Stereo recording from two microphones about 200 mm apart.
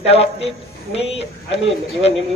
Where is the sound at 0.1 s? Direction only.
30° left (ahead or behind).